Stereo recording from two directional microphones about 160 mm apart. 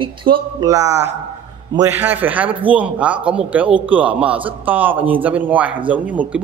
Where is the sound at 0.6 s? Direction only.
20° right (ahead or behind).